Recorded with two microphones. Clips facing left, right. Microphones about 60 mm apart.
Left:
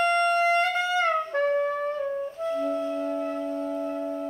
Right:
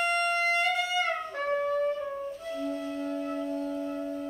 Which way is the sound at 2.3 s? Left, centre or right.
Left.